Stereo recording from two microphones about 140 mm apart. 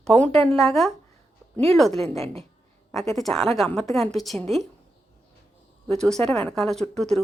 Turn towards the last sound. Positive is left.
turn(degrees=5)  # may be behind; listen again after turning